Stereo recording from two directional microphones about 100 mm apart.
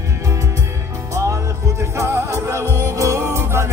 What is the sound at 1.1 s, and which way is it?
Music, 30° right (ahead or behind).